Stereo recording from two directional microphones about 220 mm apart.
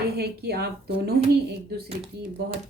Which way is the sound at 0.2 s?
45° right (ahead or behind).